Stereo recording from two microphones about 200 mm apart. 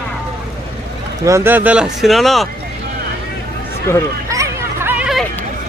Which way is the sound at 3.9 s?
10° left (ahead or behind).